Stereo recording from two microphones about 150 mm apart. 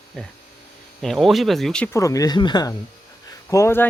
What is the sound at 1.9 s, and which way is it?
Speech, 20° left (ahead or behind).